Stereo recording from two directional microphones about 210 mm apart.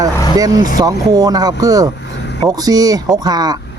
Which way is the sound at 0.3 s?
15° right (ahead or behind).